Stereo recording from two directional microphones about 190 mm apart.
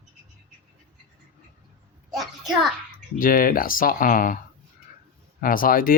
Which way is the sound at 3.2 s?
50° left (ahead or behind).